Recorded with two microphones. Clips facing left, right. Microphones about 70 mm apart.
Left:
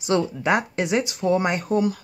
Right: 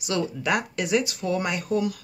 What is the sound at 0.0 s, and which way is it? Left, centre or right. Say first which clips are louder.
Speech: left 5 dB; left.